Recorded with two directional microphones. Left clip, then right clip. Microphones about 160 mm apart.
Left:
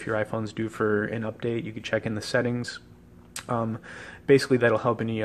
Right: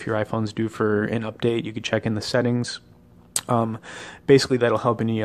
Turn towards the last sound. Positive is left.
turn(degrees=-25)  # may be behind; listen again after turning